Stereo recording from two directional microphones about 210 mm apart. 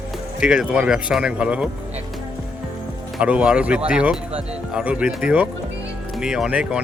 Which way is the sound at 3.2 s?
5° right (ahead or behind).